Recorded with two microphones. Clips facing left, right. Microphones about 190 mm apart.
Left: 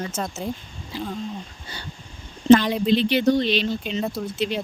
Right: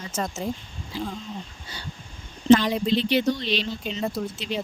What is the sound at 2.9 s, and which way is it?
Speech, 60° left (ahead or behind).